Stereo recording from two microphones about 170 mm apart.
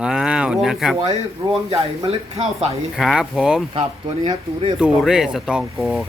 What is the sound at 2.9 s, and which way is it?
Speech, centre (ahead or behind).